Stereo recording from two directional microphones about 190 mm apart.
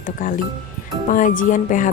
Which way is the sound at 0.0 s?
45° left (ahead or behind).